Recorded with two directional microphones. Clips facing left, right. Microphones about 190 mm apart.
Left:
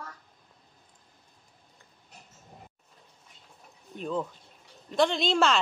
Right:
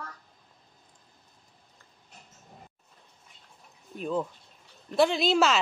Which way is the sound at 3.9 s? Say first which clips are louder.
Right 2 dB; 5° right (ahead or behind).